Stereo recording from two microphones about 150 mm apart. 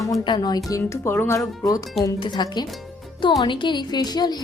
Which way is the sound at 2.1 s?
30° left (ahead or behind).